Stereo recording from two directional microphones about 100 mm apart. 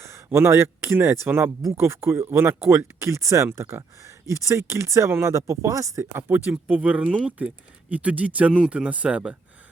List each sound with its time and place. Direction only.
0.0 s speech: 30° right (ahead or behind); by 9.3 s 10° right (ahead or behind)